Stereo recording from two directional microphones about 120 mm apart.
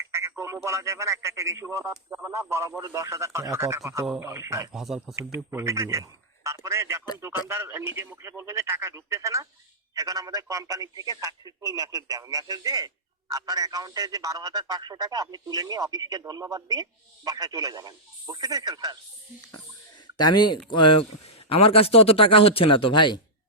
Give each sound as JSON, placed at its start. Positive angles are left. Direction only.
{"t": 0.0, "sound": "speech", "side_deg": -25}
{"t": 4.7, "sound": "speech", "side_deg": -5}
{"t": 5.1, "sound": "a man's voice", "side_deg": -25}
{"t": 20.1, "sound": "speech", "side_deg": 35}